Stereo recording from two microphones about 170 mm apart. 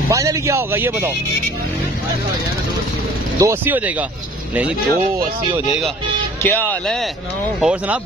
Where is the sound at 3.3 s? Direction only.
15° right (ahead or behind).